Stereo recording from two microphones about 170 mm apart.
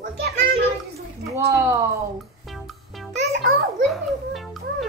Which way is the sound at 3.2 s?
90° right.